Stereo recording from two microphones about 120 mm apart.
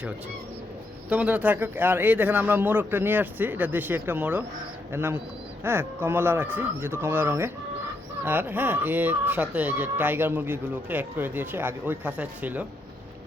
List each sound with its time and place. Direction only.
1.1 s speech: 10° right (ahead or behind)